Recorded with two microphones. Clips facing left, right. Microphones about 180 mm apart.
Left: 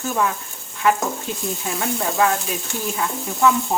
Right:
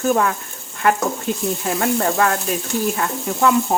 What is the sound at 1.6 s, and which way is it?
Speech, 55° right (ahead or behind).